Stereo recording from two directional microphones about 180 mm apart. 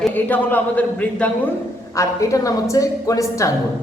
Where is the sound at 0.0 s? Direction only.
10° left (ahead or behind).